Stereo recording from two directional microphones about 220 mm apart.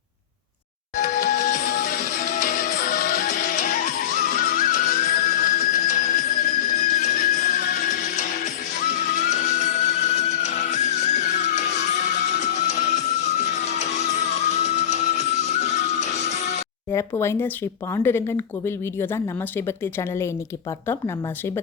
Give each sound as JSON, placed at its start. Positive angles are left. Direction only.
{"t": 0.9, "sound": "music", "side_deg": 35}
{"t": 8.1, "sound": "music", "side_deg": 30}
{"t": 16.9, "sound": "speech", "side_deg": 10}